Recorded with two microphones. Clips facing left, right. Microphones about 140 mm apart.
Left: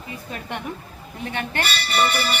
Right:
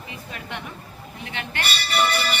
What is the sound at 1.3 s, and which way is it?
Speech, 45° left (ahead or behind).